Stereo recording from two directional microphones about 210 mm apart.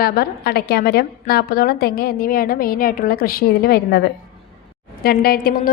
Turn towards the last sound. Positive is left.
turn(degrees=45)  # may be behind; listen again after turning